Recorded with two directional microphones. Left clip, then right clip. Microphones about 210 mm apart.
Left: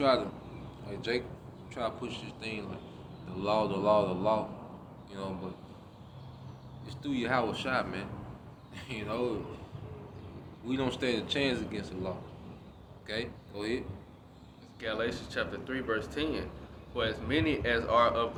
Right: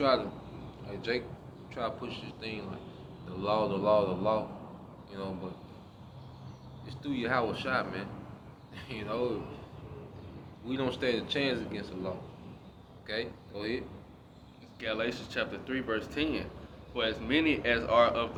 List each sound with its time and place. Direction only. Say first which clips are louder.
0.0 s a man's voice: even; 25° left (ahead or behind)
6.8 s a man's voice: even; 25° left (ahead or behind)
10.7 s a man's voice: right 1 dB; 25° left (ahead or behind)
14.8 s speech: even; 20° right (ahead or behind)